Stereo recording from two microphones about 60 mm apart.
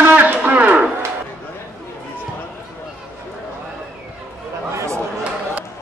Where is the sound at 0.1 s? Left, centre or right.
Right.